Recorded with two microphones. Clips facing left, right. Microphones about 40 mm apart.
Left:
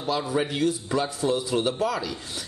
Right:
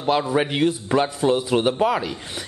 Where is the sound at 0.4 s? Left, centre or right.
Right.